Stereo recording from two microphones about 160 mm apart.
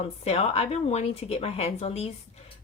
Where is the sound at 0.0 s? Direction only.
40° left (ahead or behind).